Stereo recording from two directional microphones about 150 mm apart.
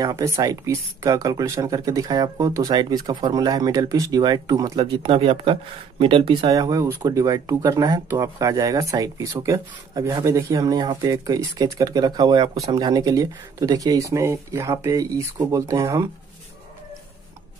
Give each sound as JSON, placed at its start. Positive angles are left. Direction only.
{"t": 0.0, "sound": "speech", "side_deg": -20}
{"t": 4.7, "sound": "speech", "side_deg": -35}
{"t": 6.5, "sound": "speech", "side_deg": -25}